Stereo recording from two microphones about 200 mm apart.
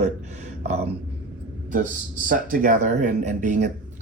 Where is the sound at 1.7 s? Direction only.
40° right (ahead or behind).